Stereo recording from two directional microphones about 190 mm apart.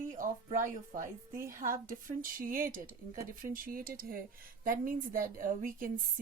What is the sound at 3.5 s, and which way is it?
A woman's voice, 45° right (ahead or behind).